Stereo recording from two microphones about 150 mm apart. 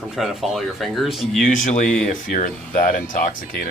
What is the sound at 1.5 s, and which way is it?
Speech, 60° left (ahead or behind).